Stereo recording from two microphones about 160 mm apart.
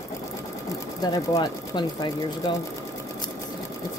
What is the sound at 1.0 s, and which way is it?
Speech, 25° left (ahead or behind).